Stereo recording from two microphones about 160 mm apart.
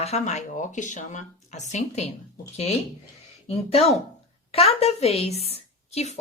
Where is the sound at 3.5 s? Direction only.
40° left (ahead or behind).